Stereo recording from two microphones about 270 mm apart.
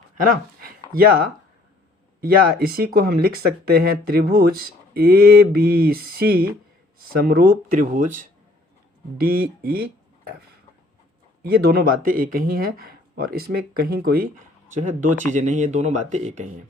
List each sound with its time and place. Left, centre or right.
2.2 s speech: right
11.4 s speech: right